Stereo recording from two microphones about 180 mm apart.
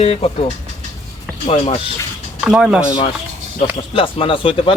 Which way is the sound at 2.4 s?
5° right (ahead or behind).